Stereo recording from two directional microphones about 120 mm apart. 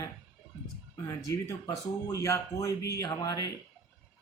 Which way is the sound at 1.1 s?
30° left (ahead or behind).